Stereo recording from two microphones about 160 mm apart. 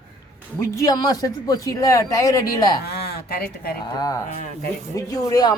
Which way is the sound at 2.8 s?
75° left (ahead or behind).